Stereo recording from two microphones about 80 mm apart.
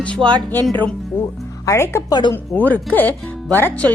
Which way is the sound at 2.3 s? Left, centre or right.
Left.